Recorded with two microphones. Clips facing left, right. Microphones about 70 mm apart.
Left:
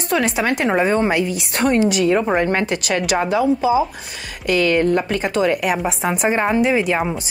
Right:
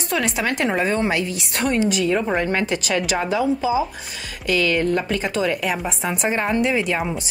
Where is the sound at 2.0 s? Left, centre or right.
Centre.